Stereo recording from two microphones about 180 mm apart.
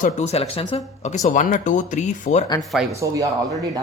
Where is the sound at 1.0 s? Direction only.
45° left (ahead or behind).